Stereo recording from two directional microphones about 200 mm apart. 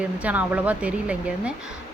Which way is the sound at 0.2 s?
10° right (ahead or behind).